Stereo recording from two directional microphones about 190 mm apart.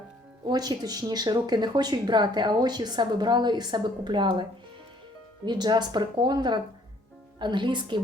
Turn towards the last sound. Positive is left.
turn(degrees=-25)  # may be behind; listen again after turning